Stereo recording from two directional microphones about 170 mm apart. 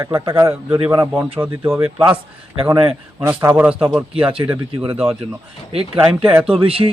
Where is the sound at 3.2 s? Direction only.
15° right (ahead or behind).